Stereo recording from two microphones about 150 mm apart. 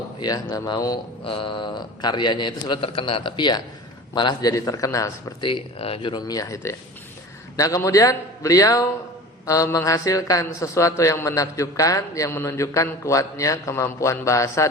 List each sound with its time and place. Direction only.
0.2 s a man's voice: 25° left (ahead or behind)
1.2 s a man's voice: 35° left (ahead or behind)
5.4 s a man's voice: 35° left (ahead or behind)